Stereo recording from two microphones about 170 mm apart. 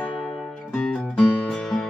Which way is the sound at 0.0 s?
5° left (ahead or behind).